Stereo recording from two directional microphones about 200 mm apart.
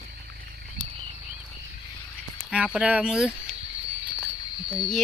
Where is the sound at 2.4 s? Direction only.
5° right (ahead or behind).